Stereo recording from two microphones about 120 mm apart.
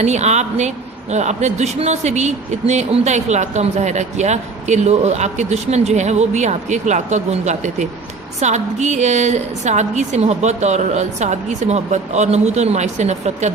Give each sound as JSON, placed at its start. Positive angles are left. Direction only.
{"t": 0.0, "sound": "speech", "side_deg": -70}